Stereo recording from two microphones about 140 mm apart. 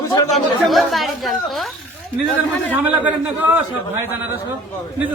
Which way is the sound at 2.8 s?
10° right (ahead or behind).